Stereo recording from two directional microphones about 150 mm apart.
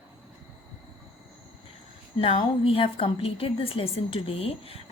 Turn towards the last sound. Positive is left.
turn(degrees=40)  # may be behind; listen again after turning